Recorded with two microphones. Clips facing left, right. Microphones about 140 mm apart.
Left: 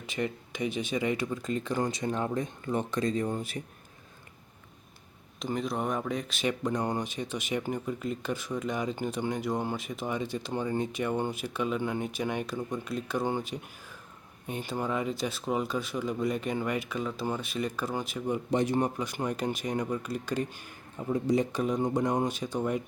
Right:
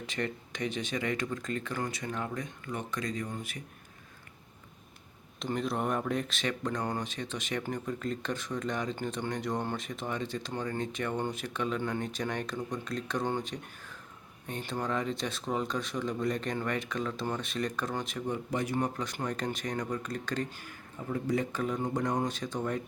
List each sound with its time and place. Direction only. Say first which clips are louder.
0.2 s speech: left 3 dB; 10° left (ahead or behind); by 3.6 s 30° left (ahead or behind)
5.4 s speech: left 1 dB; centre (ahead or behind)
6.5 s speech: left 4 dB; 15° left (ahead or behind)
18.5 s speech: left 5 dB; 25° left (ahead or behind)
18.9 s speech: left 3 dB; 10° left (ahead or behind)